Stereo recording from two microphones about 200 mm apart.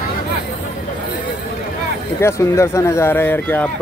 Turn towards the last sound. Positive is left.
turn(degrees=10)  # may be behind; listen again after turning